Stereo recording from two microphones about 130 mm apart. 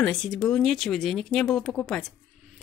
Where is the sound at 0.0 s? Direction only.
5° left (ahead or behind).